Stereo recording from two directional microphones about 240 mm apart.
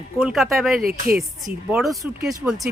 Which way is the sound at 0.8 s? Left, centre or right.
Right.